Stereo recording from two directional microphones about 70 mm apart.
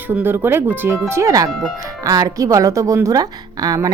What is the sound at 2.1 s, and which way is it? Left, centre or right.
A woman's voice, right.